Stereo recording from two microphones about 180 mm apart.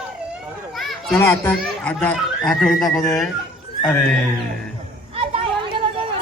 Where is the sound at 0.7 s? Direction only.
Centre (ahead or behind).